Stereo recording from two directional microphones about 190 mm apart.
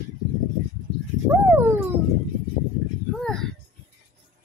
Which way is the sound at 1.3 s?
10° right (ahead or behind).